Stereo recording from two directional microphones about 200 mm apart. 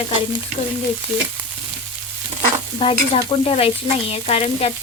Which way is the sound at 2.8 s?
30° left (ahead or behind).